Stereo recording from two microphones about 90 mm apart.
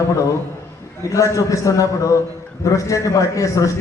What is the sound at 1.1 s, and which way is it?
A man's voice, 40° left (ahead or behind).